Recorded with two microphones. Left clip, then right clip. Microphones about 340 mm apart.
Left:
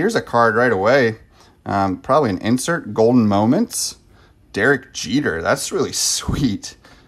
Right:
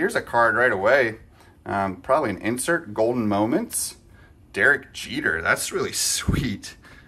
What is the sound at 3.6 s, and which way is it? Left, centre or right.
Speech, centre.